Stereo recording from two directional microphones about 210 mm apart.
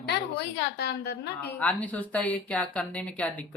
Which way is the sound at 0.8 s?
50° left (ahead or behind).